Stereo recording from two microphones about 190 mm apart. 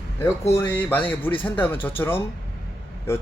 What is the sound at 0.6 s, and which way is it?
Speech, 10° left (ahead or behind).